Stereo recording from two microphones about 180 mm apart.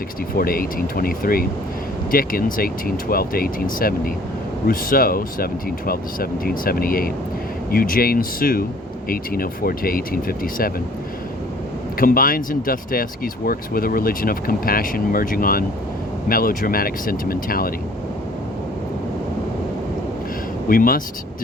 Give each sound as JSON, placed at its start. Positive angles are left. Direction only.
{"t": 0.3, "sound": "speech", "side_deg": 55}
{"t": 11.9, "sound": "speech", "side_deg": 50}
{"t": 20.7, "sound": "speech", "side_deg": 55}